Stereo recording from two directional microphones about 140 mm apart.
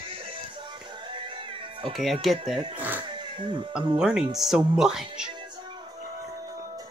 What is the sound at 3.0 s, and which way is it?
Cat, 35° right (ahead or behind).